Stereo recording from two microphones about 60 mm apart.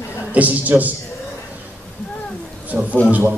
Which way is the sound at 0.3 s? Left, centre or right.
Right.